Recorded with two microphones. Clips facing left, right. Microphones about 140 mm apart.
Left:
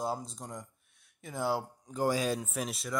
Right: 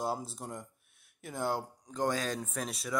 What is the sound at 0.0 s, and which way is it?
Speech, centre (ahead or behind).